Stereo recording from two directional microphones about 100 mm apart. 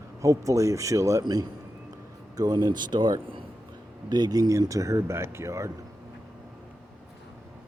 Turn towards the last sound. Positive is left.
turn(degrees=-30)  # may be behind; listen again after turning